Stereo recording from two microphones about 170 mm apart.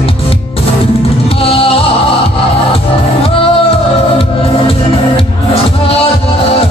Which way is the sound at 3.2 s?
35° left (ahead or behind).